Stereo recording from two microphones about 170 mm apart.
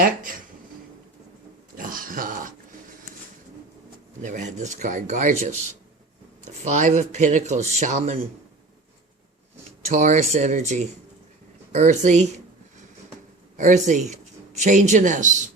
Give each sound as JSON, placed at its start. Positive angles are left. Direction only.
{"t": 0.2, "sound": "a sound", "side_deg": -55}
{"t": 1.7, "sound": "dog", "side_deg": -55}
{"t": 4.2, "sound": "speech", "side_deg": -45}
{"t": 9.9, "sound": "speech", "side_deg": -45}
{"t": 13.6, "sound": "speech", "side_deg": -45}